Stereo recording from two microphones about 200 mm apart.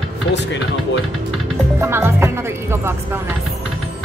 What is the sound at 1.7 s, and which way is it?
Music, 10° right (ahead or behind).